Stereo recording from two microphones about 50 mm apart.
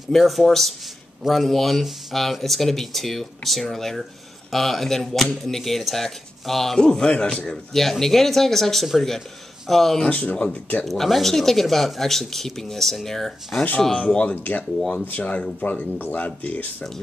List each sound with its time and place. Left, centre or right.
0.1 s speech: centre; by 7.4 s left
7.4 s speech: centre
10.0 s speech: left
10.9 s speech: centre
13.7 s speech: centre
16.0 s speech: left